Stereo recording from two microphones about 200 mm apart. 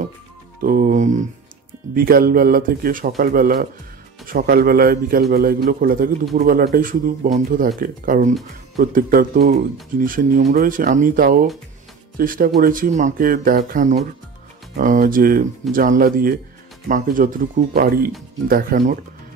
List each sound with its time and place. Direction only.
0.6 s speech: 45° right (ahead or behind)